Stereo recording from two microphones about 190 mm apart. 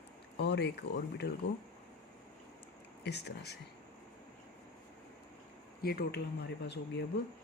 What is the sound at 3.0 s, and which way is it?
Speech, 60° left (ahead or behind).